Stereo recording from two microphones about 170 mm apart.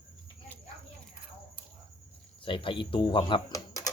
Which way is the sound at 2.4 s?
30° left (ahead or behind).